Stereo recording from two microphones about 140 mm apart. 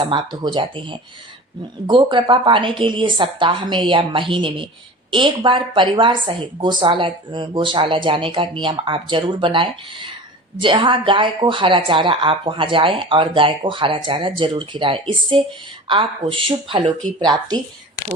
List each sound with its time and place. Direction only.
0.0 s a woman's voice: 30° right (ahead or behind)